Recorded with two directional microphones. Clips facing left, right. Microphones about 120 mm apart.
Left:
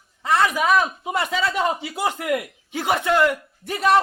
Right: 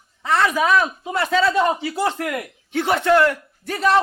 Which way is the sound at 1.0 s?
15° left (ahead or behind).